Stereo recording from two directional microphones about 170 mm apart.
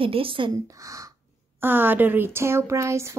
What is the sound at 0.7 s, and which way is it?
Speech, 20° right (ahead or behind).